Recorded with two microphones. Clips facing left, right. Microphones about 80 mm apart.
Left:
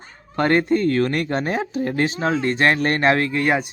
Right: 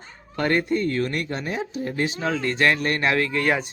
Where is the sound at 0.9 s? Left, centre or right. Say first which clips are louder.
Left 5 dB; left.